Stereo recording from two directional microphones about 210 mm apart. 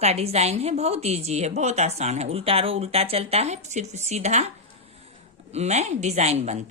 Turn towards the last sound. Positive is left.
turn(degrees=-30)  # may be behind; listen again after turning